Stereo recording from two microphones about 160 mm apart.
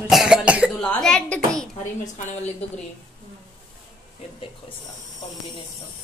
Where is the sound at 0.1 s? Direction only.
5° right (ahead or behind).